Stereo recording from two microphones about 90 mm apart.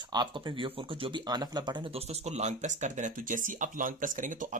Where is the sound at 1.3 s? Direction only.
50° right (ahead or behind).